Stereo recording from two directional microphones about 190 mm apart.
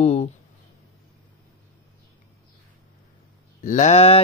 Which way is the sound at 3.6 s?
40° left (ahead or behind).